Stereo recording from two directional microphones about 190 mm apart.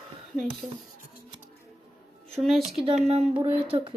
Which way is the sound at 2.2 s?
Centre (ahead or behind).